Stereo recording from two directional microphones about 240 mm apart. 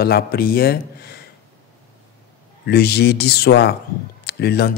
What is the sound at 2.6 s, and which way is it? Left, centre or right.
Speech, left.